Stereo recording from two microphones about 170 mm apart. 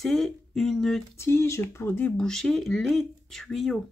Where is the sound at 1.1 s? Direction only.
15° left (ahead or behind).